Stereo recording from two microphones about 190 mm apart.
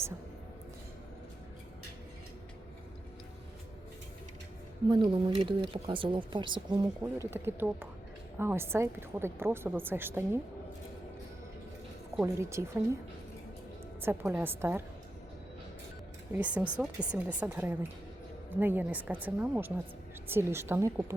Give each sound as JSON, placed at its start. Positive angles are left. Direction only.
{"t": 4.9, "sound": "speech", "side_deg": -25}
{"t": 7.0, "sound": "a woman's voice", "side_deg": -15}
{"t": 12.2, "sound": "a woman's voice", "side_deg": -15}
{"t": 14.0, "sound": "a woman's voice", "side_deg": -10}
{"t": 16.3, "sound": "a woman's voice", "side_deg": -10}